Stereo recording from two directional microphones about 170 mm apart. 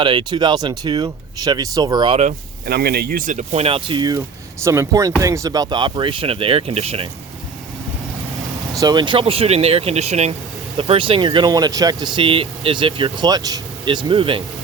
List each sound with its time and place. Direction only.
0.0 s speech: 30° right (ahead or behind)
2.6 s speech: 70° right (ahead or behind); by 7.1 s 35° right (ahead or behind)
8.7 s speech: 20° right (ahead or behind)